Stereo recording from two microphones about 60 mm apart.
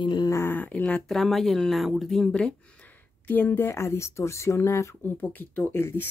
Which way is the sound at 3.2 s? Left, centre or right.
Left.